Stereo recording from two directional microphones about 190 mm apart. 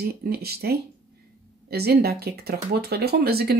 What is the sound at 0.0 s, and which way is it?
Speech, 55° right (ahead or behind).